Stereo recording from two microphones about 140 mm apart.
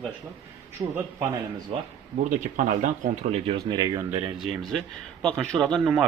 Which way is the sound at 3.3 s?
40° right (ahead or behind).